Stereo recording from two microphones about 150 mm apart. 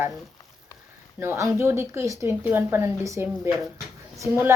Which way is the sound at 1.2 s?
15° right (ahead or behind).